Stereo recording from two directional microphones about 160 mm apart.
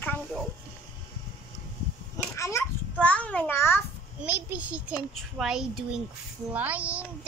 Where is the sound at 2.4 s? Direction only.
15° left (ahead or behind).